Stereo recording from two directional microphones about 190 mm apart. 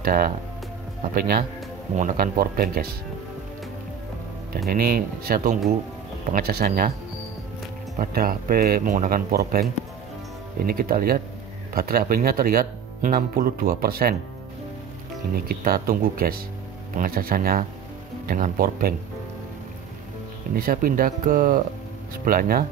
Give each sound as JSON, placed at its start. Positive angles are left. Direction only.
{"t": 0.0, "sound": "speech", "side_deg": -50}
{"t": 4.6, "sound": "speech", "side_deg": -55}
{"t": 8.0, "sound": "speech", "side_deg": -50}
{"t": 15.3, "sound": "speech", "side_deg": -50}
{"t": 20.5, "sound": "speech", "side_deg": -50}